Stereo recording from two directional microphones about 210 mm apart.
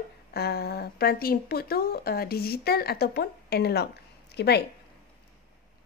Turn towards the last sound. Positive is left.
turn(degrees=50)  # may be behind; listen again after turning